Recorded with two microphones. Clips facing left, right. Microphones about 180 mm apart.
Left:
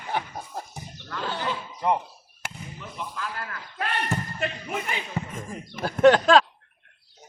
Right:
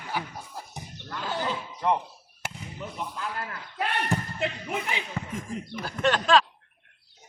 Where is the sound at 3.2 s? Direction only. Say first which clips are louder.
Even; 20° right (ahead or behind).